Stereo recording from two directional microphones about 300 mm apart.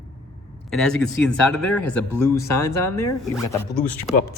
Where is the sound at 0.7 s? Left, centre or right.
Centre.